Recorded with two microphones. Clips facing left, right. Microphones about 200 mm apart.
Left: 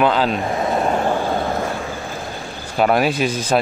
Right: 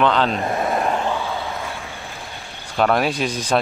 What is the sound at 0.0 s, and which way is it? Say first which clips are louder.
Speech: left 1 dB; 5° left (ahead or behind).